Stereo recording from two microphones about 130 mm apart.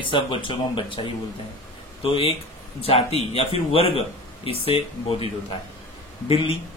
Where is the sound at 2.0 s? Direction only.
45° left (ahead or behind).